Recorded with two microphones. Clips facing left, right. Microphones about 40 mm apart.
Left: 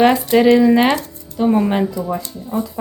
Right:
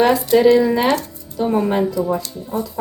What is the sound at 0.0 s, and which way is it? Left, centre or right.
Speech, left.